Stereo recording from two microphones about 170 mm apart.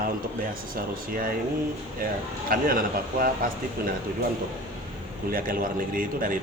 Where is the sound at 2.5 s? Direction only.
55° right (ahead or behind).